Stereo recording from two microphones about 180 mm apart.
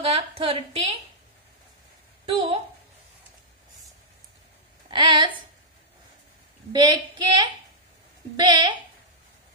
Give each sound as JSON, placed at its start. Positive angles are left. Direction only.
{"t": 0.0, "sound": "a woman's voice", "side_deg": -35}
{"t": 2.2, "sound": "speech", "side_deg": -30}
{"t": 4.8, "sound": "speech", "side_deg": -25}
{"t": 6.7, "sound": "a woman's voice", "side_deg": -25}